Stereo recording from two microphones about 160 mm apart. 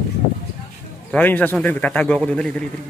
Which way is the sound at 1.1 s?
10° left (ahead or behind).